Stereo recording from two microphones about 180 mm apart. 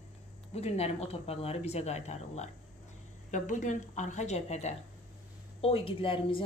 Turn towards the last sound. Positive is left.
turn(degrees=30)  # may be behind; listen again after turning